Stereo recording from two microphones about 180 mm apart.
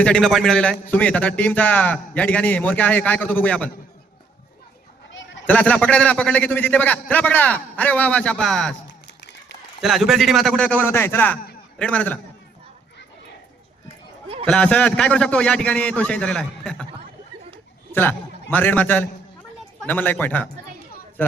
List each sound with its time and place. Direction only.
0.0 s a man's voice: 5° left (ahead or behind)
5.5 s a man's voice: 5° left (ahead or behind)
8.9 s a sound: 70° left (ahead or behind)
9.8 s a man's voice: centre (ahead or behind)
14.4 s a man's voice: 5° left (ahead or behind)
17.9 s a man's voice: 10° left (ahead or behind)